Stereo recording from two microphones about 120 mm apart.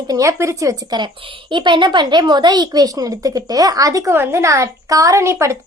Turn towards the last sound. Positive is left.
turn(degrees=-25)  # may be behind; listen again after turning